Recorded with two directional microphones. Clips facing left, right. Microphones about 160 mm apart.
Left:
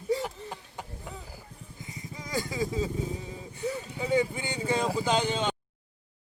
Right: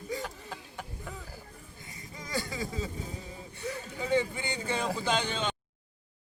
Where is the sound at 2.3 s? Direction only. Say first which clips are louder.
Left 4 dB; 15° left (ahead or behind).